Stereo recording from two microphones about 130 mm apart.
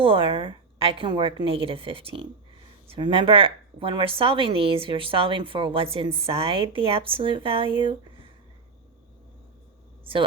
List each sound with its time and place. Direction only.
0.0 s a woman's voice: 45° right (ahead or behind)